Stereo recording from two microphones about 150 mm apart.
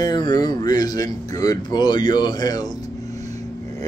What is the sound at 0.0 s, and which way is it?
Speech, 30° left (ahead or behind).